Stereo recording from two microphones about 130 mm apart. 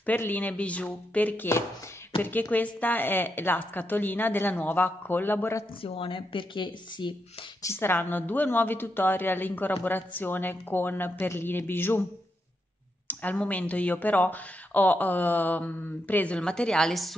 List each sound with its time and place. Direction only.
0.0 s speech: 15° left (ahead or behind)
5.8 s speech: 45° left (ahead or behind)
7.6 s speech: 20° left (ahead or behind)
13.0 s speech: 15° left (ahead or behind)